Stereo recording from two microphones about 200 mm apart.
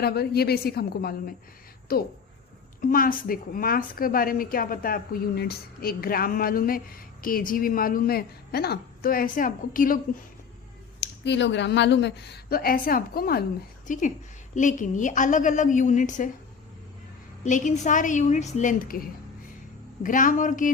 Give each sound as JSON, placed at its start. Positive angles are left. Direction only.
{"t": 0.0, "sound": "a woman's voice", "side_deg": 50}
{"t": 11.0, "sound": "a woman's voice", "side_deg": 60}
{"t": 17.4, "sound": "a woman's voice", "side_deg": 40}